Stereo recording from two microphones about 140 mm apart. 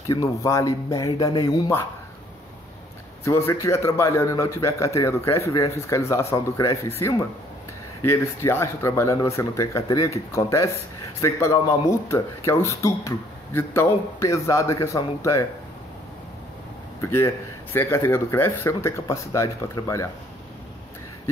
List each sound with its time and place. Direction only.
0.1 s a man's voice: 25° left (ahead or behind)
1.1 s speech: 35° left (ahead or behind)
1.4 s a man's voice: 20° left (ahead or behind)
3.3 s a man's voice: 20° left (ahead or behind)
17.7 s a man's voice: 20° left (ahead or behind)